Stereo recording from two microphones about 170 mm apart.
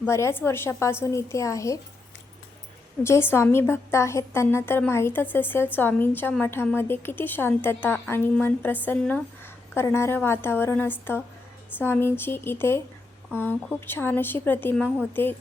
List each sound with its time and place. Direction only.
0.0 s a woman's voice: 15° left (ahead or behind)
3.0 s a woman's voice: 15° left (ahead or behind)